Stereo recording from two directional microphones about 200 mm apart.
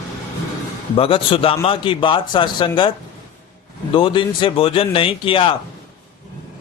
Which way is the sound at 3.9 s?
25° left (ahead or behind).